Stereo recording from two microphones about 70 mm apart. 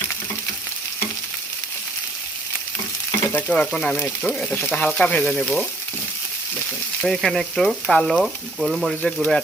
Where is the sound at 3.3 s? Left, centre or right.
Left.